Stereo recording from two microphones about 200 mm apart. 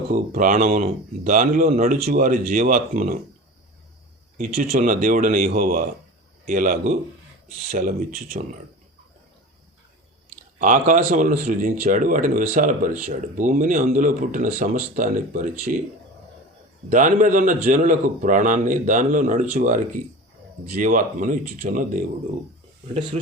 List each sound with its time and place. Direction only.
0.1 s speech: 40° right (ahead or behind)
4.4 s speech: 45° right (ahead or behind)
10.6 s speech: 40° right (ahead or behind)
16.9 s speech: 40° right (ahead or behind)